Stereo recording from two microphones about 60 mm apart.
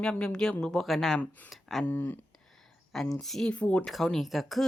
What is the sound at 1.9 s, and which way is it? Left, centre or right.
Speech, left.